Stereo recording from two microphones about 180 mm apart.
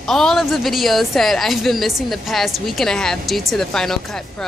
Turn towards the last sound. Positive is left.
turn(degrees=0)  # may be behind; listen again after turning